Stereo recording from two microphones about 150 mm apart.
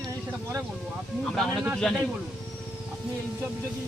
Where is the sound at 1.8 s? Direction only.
5° left (ahead or behind).